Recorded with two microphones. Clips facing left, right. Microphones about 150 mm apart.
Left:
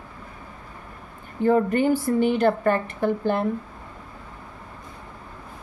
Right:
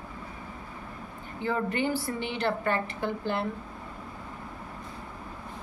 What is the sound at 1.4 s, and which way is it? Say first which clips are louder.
A woman's voice: left 9 dB; 45° left (ahead or behind).